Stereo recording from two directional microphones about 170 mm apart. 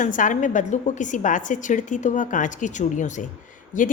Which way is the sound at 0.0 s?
50° left (ahead or behind).